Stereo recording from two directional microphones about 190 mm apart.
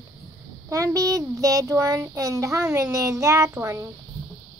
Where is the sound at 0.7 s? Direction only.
15° right (ahead or behind).